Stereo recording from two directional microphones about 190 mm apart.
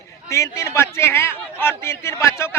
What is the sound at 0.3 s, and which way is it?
A man's voice, 15° left (ahead or behind).